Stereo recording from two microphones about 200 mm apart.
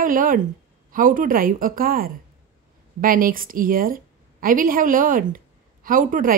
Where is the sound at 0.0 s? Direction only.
45° right (ahead or behind).